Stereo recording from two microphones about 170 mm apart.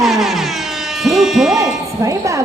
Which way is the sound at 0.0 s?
Centre (ahead or behind).